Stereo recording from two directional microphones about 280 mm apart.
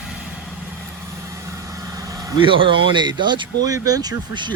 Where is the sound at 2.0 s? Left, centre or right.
Centre.